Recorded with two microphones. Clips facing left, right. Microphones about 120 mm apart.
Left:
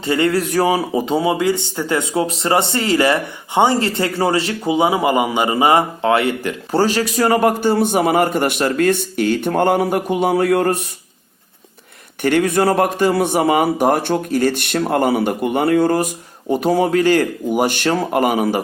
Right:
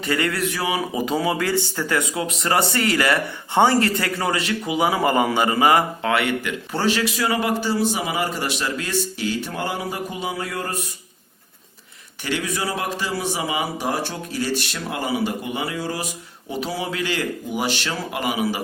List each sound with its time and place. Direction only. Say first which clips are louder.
0.0 s speech: left 6 dB; 25° left (ahead or behind); by 10.8 s 65° left (ahead or behind)
12.2 s a man's voice: left 11 dB; 55° left (ahead or behind)